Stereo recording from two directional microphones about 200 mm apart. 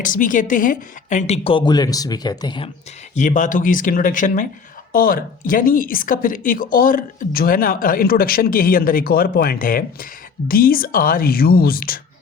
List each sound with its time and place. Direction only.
0.0 s a woman's voice: 40° left (ahead or behind); by 2.6 s 20° left (ahead or behind)
3.2 s speech: 40° left (ahead or behind)